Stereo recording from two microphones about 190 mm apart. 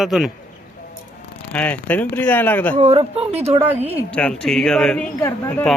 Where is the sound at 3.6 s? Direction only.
10° right (ahead or behind).